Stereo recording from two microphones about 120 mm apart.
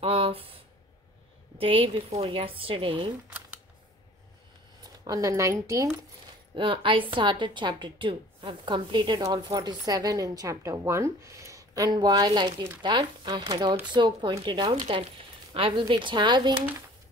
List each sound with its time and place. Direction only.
0.0 s a sound: 50° right (ahead or behind)
1.6 s a woman's voice: 50° right (ahead or behind)
3.3 s camera: 10° right (ahead or behind)
4.8 s speech: 30° right (ahead or behind)
6.5 s a woman's voice: 45° right (ahead or behind)